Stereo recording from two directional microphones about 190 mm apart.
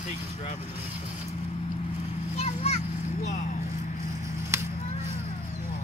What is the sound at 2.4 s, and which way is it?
Children playing, 35° left (ahead or behind).